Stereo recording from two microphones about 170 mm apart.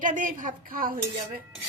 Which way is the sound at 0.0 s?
50° right (ahead or behind).